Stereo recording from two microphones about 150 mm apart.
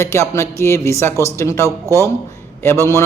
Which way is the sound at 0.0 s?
15° left (ahead or behind).